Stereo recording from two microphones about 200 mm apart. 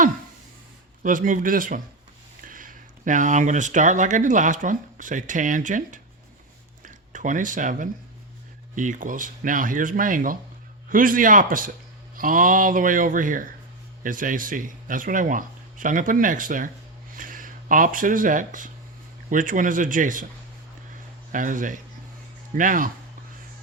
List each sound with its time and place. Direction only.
1.0 s speech: 40° right (ahead or behind)
21.3 s speech: 40° right (ahead or behind)